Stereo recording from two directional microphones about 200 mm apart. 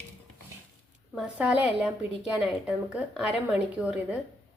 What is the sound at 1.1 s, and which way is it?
A woman's voice, centre (ahead or behind).